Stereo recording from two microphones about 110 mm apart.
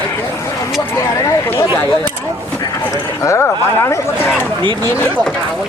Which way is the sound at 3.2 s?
25° left (ahead or behind).